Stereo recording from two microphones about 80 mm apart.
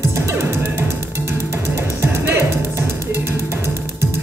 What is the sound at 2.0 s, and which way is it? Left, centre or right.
Music, right.